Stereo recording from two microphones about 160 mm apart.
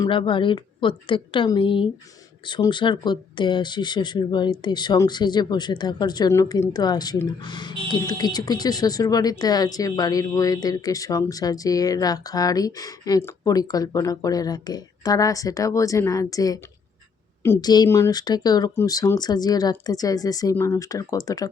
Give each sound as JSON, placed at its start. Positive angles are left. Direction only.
{"t": 0.0, "sound": "a woman's voice", "side_deg": 30}